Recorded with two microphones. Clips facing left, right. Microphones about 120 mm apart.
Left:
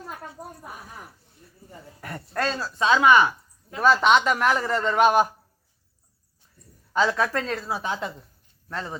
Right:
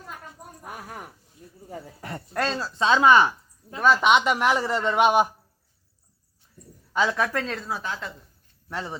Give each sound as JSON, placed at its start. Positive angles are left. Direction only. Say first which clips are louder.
{"t": 0.7, "sound": "speech", "louder": "right 3 dB", "side_deg": -75}
{"t": 2.0, "sound": "a man's voice", "louder": "even", "side_deg": -20}
{"t": 6.6, "sound": "speech", "louder": "left 1 dB", "side_deg": -5}
{"t": 7.9, "sound": "a woman's voice", "louder": "left 4 dB", "side_deg": 20}
{"t": 8.7, "sound": "speech", "louder": "even", "side_deg": -15}